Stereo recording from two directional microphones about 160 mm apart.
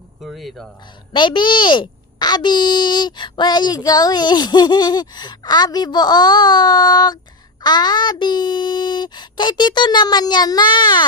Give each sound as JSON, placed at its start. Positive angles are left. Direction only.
{"t": 0.2, "sound": "speech", "side_deg": 0}
{"t": 1.1, "sound": "a child's voice", "side_deg": 30}